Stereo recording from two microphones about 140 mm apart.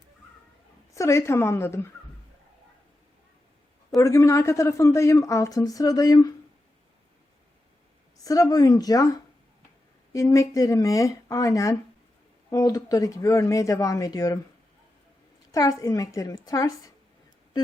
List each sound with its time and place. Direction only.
0.9 s a woman's voice: 20° left (ahead or behind)
3.9 s a woman's voice: 20° left (ahead or behind)
8.2 s a woman's voice: 25° left (ahead or behind)
15.5 s a woman's voice: 25° left (ahead or behind)